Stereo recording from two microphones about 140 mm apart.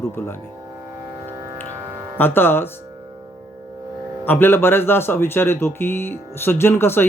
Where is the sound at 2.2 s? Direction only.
15° left (ahead or behind).